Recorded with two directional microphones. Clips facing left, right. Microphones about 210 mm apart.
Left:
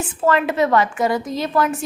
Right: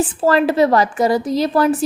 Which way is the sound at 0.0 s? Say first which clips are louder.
Right 4 dB; 35° right (ahead or behind).